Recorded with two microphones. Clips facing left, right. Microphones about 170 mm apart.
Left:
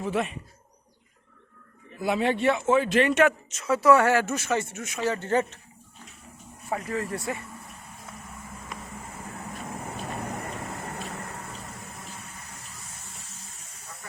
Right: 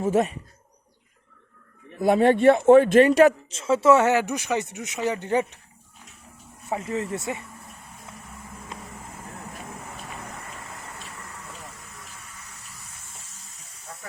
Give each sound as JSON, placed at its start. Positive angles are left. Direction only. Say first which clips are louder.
{"t": 0.0, "sound": "speech", "louder": "right 6 dB", "side_deg": -40}
{"t": 2.0, "sound": "speech", "louder": "right 7 dB", "side_deg": -50}
{"t": 6.7, "sound": "speech", "louder": "right 2 dB", "side_deg": -25}
{"t": 10.8, "sound": "vehicle", "louder": "left 6 dB", "side_deg": 40}